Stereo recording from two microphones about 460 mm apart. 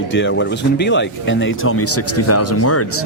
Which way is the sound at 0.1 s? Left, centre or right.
Left.